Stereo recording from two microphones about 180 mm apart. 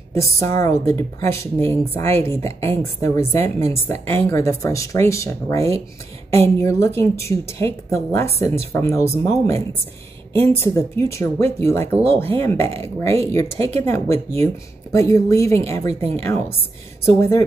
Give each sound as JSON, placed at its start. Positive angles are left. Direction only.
{"t": 0.1, "sound": "speech", "side_deg": 15}
{"t": 15.9, "sound": "speech", "side_deg": -35}
{"t": 17.0, "sound": "speech", "side_deg": 15}